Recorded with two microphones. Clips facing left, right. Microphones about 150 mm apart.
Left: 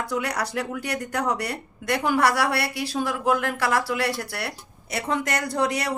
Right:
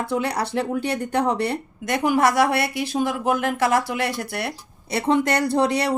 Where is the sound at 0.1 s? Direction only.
30° right (ahead or behind).